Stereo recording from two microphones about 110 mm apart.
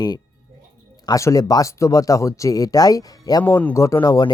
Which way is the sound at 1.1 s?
30° left (ahead or behind).